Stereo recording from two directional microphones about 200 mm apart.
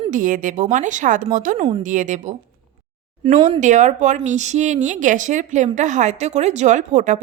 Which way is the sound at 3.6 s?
35° right (ahead or behind).